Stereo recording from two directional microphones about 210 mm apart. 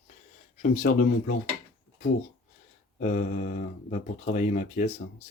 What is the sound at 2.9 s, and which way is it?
Speech, 35° left (ahead or behind).